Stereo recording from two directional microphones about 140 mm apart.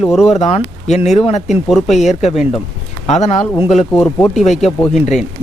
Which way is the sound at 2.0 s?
55° left (ahead or behind).